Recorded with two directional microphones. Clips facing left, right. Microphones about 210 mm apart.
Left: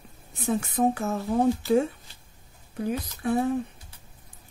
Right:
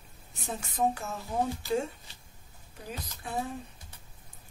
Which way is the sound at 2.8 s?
60° left (ahead or behind).